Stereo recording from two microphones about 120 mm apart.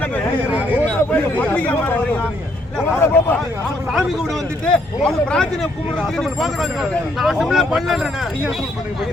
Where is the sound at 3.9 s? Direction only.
Centre (ahead or behind).